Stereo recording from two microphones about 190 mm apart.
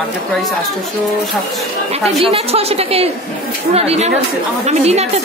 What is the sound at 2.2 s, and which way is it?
A woman's voice, 30° right (ahead or behind).